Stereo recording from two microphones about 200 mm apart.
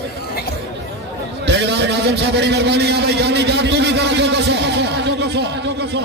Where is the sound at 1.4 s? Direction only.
60° right (ahead or behind).